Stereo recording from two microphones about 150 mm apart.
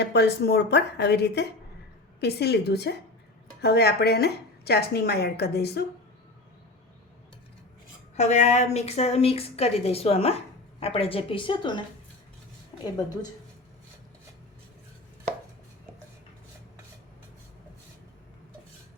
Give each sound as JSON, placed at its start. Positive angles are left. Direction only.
{"t": 0.0, "sound": "a woman's voice", "side_deg": 90}
{"t": 8.1, "sound": "a woman's voice", "side_deg": 50}
{"t": 12.7, "sound": "a sound", "side_deg": 30}